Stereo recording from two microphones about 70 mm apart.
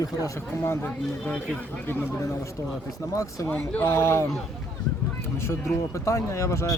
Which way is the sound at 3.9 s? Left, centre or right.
Left.